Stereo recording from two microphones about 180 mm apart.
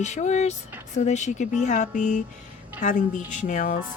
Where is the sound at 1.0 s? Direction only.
40° left (ahead or behind).